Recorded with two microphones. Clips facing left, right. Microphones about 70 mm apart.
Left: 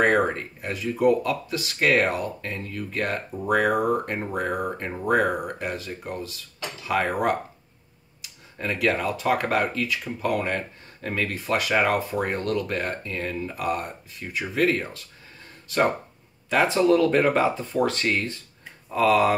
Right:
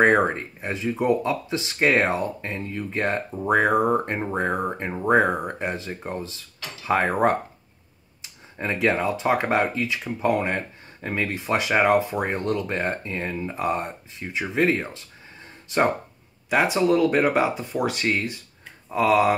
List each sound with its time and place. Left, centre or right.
0.0 s speech: right